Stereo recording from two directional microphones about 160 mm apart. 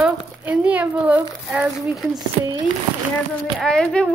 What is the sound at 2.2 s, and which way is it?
Speech, 25° right (ahead or behind).